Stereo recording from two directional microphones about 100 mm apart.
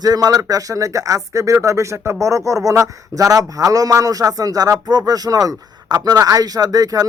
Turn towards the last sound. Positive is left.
turn(degrees=-40)  # may be behind; listen again after turning